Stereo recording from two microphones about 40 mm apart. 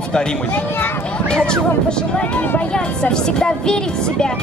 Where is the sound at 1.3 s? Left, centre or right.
Centre.